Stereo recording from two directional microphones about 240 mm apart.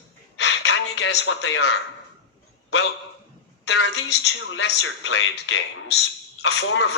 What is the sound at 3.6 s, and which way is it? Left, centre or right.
Speech, left.